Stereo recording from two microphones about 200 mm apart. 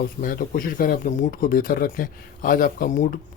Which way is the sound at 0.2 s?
45° left (ahead or behind).